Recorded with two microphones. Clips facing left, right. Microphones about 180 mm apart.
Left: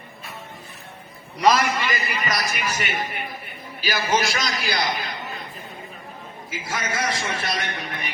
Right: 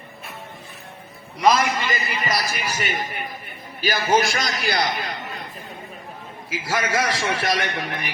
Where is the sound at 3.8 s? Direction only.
50° right (ahead or behind).